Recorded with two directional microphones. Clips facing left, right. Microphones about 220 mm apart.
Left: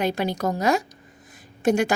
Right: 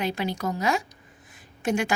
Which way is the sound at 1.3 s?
40° left (ahead or behind).